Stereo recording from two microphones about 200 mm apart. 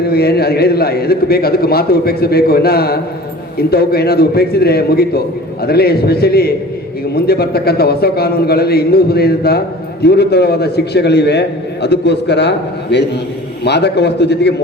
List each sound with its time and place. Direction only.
0.0 s a man's voice: 50° left (ahead or behind)